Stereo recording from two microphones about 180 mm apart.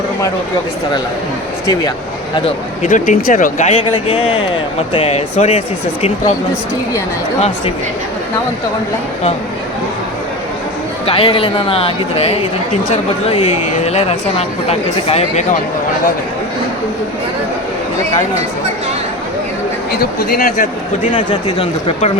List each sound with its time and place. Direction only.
2.8 s speech: 45° left (ahead or behind)
11.0 s speech: 30° left (ahead or behind)
19.9 s speech: 55° left (ahead or behind)
21.1 s speech: 25° left (ahead or behind)